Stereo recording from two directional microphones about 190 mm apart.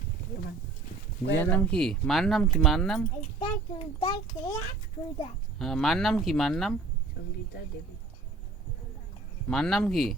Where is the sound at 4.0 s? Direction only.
30° left (ahead or behind).